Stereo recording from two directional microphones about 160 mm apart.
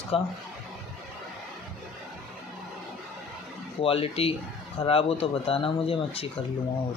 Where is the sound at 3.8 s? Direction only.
35° left (ahead or behind).